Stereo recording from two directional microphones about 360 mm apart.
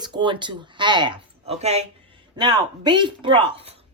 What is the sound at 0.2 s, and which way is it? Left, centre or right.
A woman's voice, centre.